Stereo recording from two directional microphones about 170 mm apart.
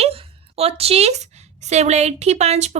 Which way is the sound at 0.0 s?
35° right (ahead or behind).